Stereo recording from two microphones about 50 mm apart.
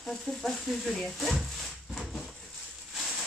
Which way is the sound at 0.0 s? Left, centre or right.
Centre.